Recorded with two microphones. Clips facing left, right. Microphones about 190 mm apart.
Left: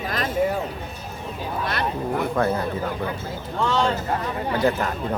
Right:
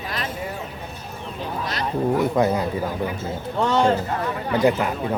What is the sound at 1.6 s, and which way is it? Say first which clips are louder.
Speech: left 3 dB; 60° left (ahead or behind).